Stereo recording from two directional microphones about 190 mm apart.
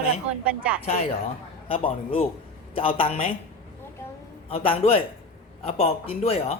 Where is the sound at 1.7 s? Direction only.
30° left (ahead or behind).